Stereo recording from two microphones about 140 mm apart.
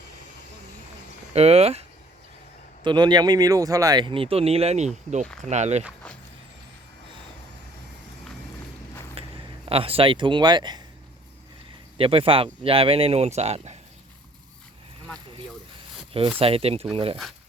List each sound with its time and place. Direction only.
1.3 s speech: 45° right (ahead or behind)
2.8 s speech: 30° right (ahead or behind); by 5.8 s 55° right (ahead or behind)
9.2 s a sound: 45° right (ahead or behind)
9.6 s speech: 45° right (ahead or behind)
11.9 s speech: 40° right (ahead or behind)
16.4 s speech: 45° right (ahead or behind)